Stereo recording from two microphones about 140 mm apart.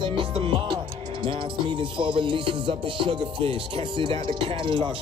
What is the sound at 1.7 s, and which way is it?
Music, 35° right (ahead or behind).